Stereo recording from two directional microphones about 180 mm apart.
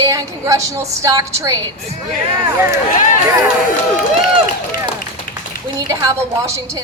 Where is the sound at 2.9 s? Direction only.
45° left (ahead or behind).